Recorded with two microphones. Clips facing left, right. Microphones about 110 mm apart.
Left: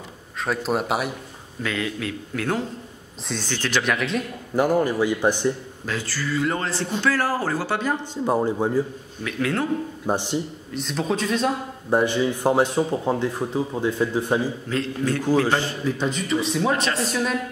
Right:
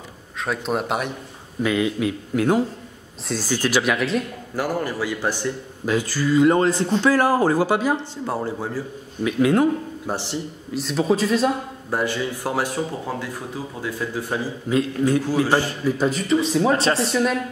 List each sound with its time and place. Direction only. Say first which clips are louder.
0.4 s a man's voice: even; centre (ahead or behind)
1.6 s a man's voice: right 6 dB; 15° right (ahead or behind)
4.6 s speech: left 5 dB; 20° left (ahead or behind)
5.9 s speech: right 7 dB; 15° right (ahead or behind)
8.0 s a man's voice: left 4 dB; 15° left (ahead or behind)
9.2 s speech: right 7 dB; 15° right (ahead or behind)
10.0 s a man's voice: left 4 dB; 20° left (ahead or behind)
10.7 s a man's voice: right 5 dB; 5° right (ahead or behind)
11.9 s speech: left 4 dB; 20° left (ahead or behind)
14.7 s a man's voice: right 8 dB; 10° right (ahead or behind)
16.7 s speech: right 4 dB; 30° right (ahead or behind)
17.0 s a man's voice: right 3 dB; centre (ahead or behind)